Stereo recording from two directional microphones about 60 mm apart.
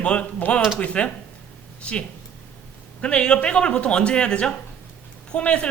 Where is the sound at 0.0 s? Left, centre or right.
Centre.